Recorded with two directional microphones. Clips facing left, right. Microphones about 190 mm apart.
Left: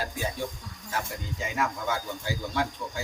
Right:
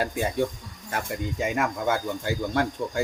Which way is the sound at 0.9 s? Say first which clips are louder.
Right 5 dB; 55° right (ahead or behind).